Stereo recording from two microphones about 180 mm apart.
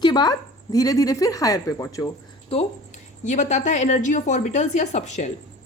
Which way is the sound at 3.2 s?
40° left (ahead or behind).